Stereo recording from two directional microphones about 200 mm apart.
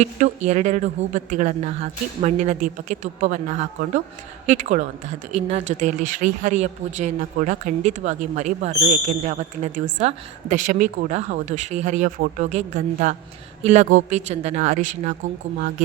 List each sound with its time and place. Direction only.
0.0 s speech: 35° right (ahead or behind)